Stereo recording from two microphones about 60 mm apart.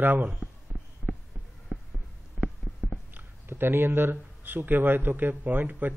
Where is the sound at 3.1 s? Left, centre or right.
Right.